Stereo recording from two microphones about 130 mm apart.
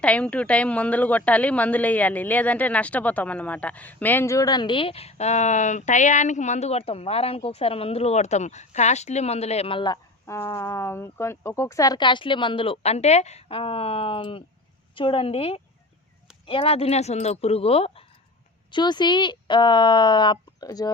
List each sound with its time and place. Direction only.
0.0 s a woman's voice: 10° left (ahead or behind); by 10.0 s 35° left (ahead or behind)
10.2 s a woman's voice: 20° left (ahead or behind); by 18.0 s 50° left (ahead or behind)
18.7 s a woman's voice: 35° left (ahead or behind)